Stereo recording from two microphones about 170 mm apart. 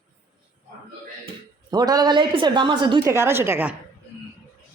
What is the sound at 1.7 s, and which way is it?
A woman's voice, 25° right (ahead or behind).